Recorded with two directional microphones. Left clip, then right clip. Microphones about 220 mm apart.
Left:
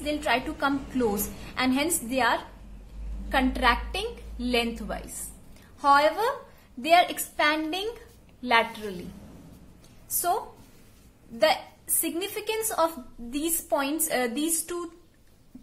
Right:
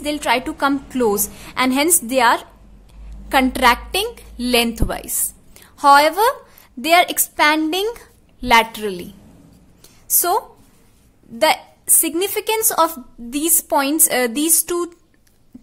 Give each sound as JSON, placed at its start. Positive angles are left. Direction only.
{"t": 0.0, "sound": "a woman's voice", "side_deg": -45}
{"t": 12.0, "sound": "a woman's voice", "side_deg": -50}